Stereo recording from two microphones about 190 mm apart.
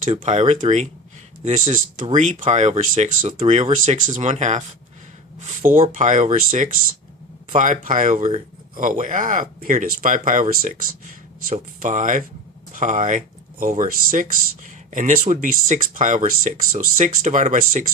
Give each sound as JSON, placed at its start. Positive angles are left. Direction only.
{"t": 0.0, "sound": "speech", "side_deg": -40}
{"t": 5.6, "sound": "speech", "side_deg": -45}